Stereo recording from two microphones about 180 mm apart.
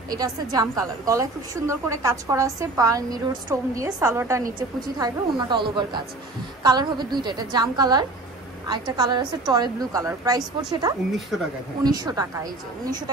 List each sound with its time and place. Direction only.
0.1 s a woman's voice: 20° right (ahead or behind)
11.1 s speech: centre (ahead or behind)
11.8 s a woman's voice: 20° right (ahead or behind)